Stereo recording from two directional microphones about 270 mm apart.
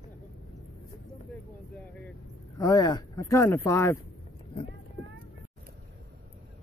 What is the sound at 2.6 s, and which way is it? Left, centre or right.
Speech, centre.